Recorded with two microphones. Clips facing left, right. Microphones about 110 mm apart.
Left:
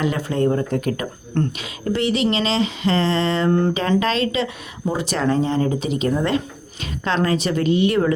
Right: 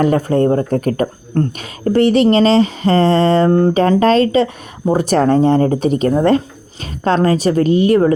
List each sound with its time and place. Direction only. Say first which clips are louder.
0.0 s a woman's voice: right 7 dB; 45° right (ahead or behind)